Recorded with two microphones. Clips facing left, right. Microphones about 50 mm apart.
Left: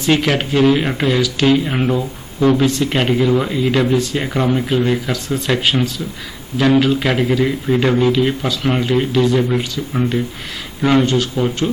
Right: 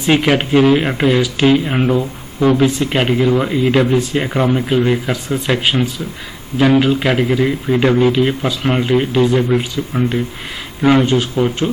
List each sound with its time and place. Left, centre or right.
0.0 s speech: centre